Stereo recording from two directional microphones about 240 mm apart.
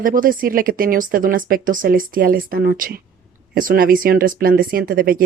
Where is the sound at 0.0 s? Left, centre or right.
Right.